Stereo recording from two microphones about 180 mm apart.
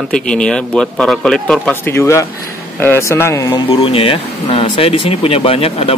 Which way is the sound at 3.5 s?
30° left (ahead or behind).